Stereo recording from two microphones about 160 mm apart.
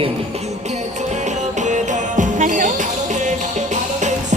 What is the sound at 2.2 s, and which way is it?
Music, 50° right (ahead or behind).